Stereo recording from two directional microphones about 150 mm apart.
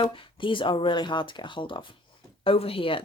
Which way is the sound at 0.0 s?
35° left (ahead or behind).